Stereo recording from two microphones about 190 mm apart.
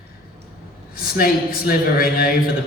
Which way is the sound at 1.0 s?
50° left (ahead or behind).